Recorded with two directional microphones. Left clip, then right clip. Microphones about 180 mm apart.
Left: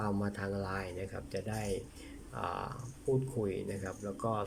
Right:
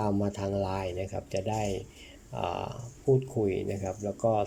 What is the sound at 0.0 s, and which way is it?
Speech, 15° right (ahead or behind).